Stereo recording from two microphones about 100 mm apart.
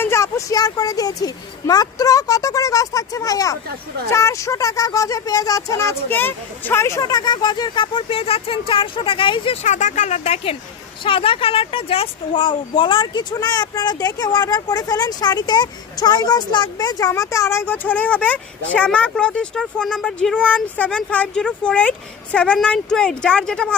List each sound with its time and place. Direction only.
0.0 s a woman's voice: 30° left (ahead or behind)
7.1 s speech: 45° left (ahead or behind)
10.2 s speech: 85° left
11.0 s speech: 60° left (ahead or behind)
13.3 s speech: 45° left (ahead or behind)
17.1 s speech: 30° left (ahead or behind); by 23.7 s 10° left (ahead or behind)